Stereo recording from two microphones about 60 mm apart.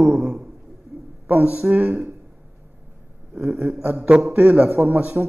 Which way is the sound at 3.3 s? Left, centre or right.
Right.